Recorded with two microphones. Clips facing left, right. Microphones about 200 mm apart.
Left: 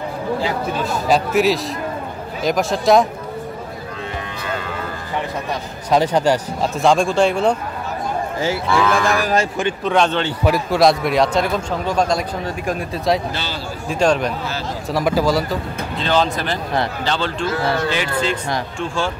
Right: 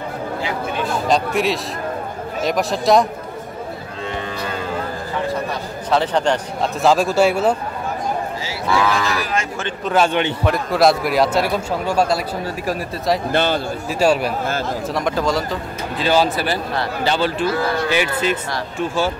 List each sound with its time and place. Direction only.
1.0 s a man's voice: 5° left (ahead or behind)
5.9 s a man's voice: 10° left (ahead or behind); by 7.5 s 5° right (ahead or behind)
8.6 s a man's voice: centre (ahead or behind)
9.0 s speech: 50° left (ahead or behind)
9.8 s a man's voice: 5° right (ahead or behind)
13.3 s speech: 55° right (ahead or behind)
13.8 s speech: 5° right (ahead or behind)
14.9 s a man's voice: 5° left (ahead or behind)
16.0 s speech: 10° right (ahead or behind)